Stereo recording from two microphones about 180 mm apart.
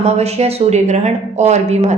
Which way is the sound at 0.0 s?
35° right (ahead or behind).